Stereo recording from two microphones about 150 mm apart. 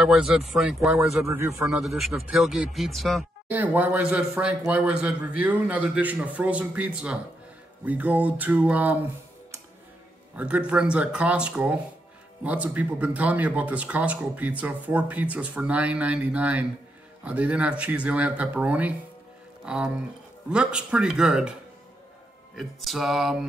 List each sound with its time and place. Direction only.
0.0 s speech: centre (ahead or behind)
1.3 s a man's voice: 20° right (ahead or behind)
1.7 s speech: centre (ahead or behind)
3.4 s speech: 10° right (ahead or behind)
10.3 s speech: 10° right (ahead or behind)
22.6 s speech: centre (ahead or behind)